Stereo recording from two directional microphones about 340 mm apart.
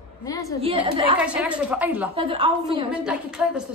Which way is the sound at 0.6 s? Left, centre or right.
Centre.